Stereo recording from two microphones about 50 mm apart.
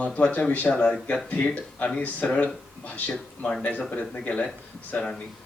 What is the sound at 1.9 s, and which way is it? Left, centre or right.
Speech, left.